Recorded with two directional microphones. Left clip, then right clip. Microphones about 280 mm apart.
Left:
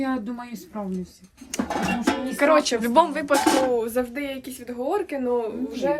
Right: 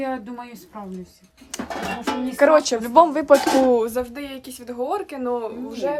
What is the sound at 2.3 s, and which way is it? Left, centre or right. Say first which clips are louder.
Speech: right 4 dB; right.